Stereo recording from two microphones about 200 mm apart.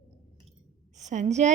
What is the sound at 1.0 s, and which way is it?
Speech, 35° right (ahead or behind).